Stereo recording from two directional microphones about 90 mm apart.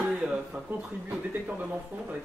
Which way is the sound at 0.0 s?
15° right (ahead or behind).